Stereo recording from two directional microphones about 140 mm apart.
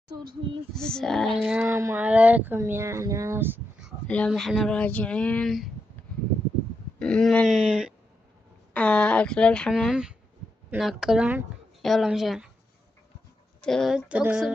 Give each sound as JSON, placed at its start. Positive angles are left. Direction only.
{"t": 0.7, "sound": "speech", "side_deg": 5}
{"t": 1.7, "sound": "speech", "side_deg": -20}
{"t": 4.1, "sound": "speech", "side_deg": 5}
{"t": 7.0, "sound": "speech", "side_deg": 5}
{"t": 8.7, "sound": "speech", "side_deg": 10}
{"t": 13.6, "sound": "speech", "side_deg": 5}